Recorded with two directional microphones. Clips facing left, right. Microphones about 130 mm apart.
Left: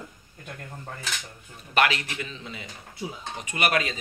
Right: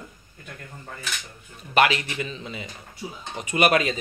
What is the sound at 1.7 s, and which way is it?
Speech, 10° right (ahead or behind).